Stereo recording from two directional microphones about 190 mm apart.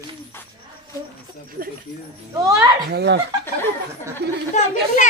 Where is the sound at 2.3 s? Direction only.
20° right (ahead or behind).